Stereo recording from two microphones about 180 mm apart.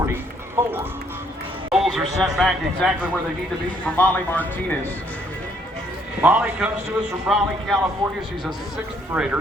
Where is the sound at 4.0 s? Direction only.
10° left (ahead or behind).